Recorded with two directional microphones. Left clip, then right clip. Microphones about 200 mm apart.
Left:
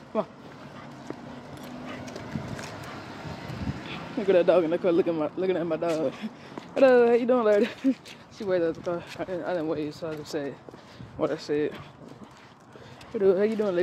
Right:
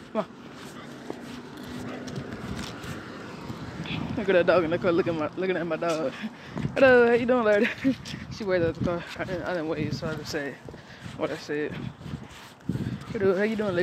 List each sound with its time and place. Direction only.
3.9 s speech: 10° left (ahead or behind)
11.1 s speech: 25° left (ahead or behind)
13.2 s speech: 10° left (ahead or behind)